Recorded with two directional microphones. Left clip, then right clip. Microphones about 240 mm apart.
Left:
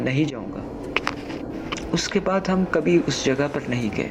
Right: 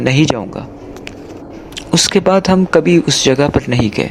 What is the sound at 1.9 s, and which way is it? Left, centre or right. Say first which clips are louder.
A man's voice: right 12 dB; right.